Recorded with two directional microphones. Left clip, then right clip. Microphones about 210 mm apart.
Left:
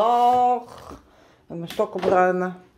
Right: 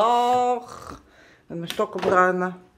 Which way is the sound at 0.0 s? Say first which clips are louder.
Left 2 dB; 5° right (ahead or behind).